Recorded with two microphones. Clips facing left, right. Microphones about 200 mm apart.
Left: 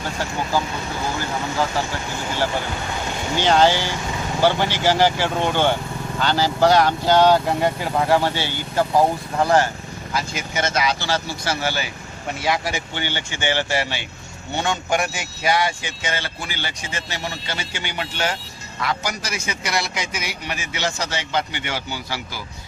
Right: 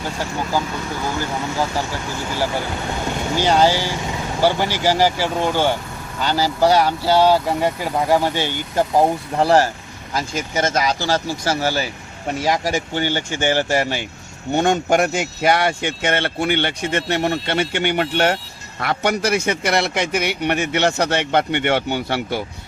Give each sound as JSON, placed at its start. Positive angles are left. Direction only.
{"t": 3.4, "sound": "speech", "side_deg": -10}
{"t": 9.4, "sound": "speech", "side_deg": -35}